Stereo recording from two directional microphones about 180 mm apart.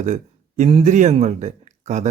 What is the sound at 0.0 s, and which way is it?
A man's voice, 40° right (ahead or behind).